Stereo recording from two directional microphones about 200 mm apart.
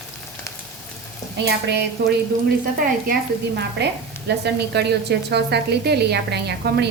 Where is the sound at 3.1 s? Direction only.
55° right (ahead or behind).